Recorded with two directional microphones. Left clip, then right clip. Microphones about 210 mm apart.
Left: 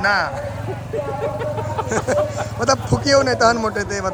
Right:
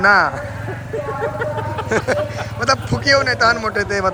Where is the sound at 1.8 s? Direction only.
45° left (ahead or behind).